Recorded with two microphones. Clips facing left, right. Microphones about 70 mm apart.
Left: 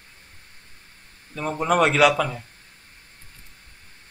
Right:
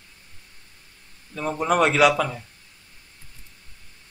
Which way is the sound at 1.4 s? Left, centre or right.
Centre.